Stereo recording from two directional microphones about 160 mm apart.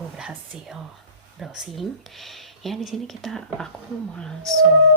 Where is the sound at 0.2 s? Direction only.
5° right (ahead or behind).